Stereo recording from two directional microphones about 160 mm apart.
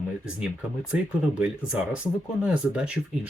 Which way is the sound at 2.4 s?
5° right (ahead or behind).